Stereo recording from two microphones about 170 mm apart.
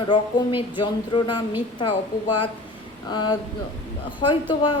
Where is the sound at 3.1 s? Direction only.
25° left (ahead or behind).